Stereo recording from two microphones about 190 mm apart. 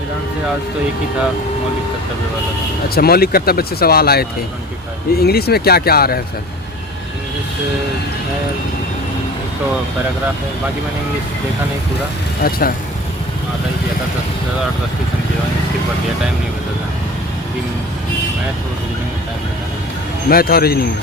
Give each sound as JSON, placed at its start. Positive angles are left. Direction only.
{"t": 2.9, "sound": "speech", "side_deg": 55}
{"t": 12.4, "sound": "speech", "side_deg": 50}
{"t": 20.3, "sound": "speech", "side_deg": 55}